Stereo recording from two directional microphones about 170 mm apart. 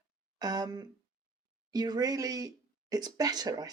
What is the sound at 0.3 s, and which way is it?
Speech, 25° right (ahead or behind).